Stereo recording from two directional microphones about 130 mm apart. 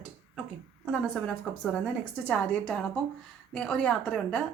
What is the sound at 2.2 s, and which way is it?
A woman's voice, 10° left (ahead or behind).